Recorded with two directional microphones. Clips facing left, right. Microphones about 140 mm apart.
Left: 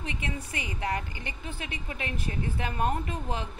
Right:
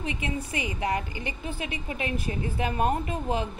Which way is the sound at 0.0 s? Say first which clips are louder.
Right 4 dB; 15° right (ahead or behind).